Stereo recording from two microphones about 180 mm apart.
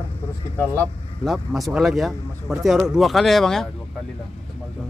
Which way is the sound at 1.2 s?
Centre (ahead or behind).